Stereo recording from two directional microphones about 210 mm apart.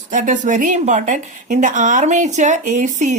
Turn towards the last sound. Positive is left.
turn(degrees=-35)  # may be behind; listen again after turning